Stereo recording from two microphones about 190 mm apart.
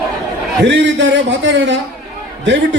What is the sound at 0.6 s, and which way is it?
A man's voice, 70° right (ahead or behind).